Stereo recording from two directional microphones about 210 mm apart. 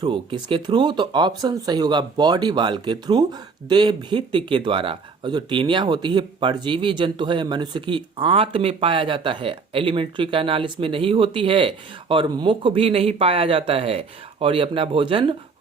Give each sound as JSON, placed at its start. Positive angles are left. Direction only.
{"t": 0.0, "sound": "speech", "side_deg": -25}